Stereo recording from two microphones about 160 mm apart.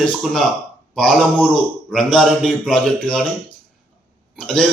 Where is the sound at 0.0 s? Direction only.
Centre (ahead or behind).